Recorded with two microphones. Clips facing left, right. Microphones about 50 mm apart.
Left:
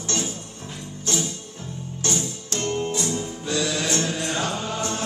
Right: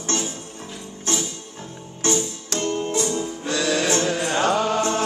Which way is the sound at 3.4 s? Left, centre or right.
Right.